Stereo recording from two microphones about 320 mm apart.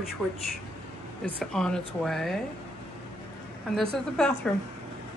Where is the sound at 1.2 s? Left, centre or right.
Centre.